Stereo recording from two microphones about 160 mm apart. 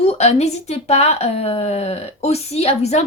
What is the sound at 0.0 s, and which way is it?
A woman's voice, 40° left (ahead or behind).